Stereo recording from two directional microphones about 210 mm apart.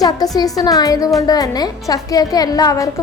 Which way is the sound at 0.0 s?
20° left (ahead or behind).